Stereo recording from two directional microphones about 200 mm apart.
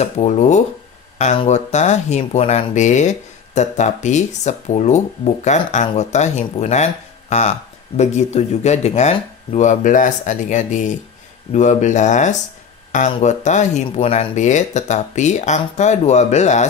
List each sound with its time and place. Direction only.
0.0 s speech: 35° left (ahead or behind)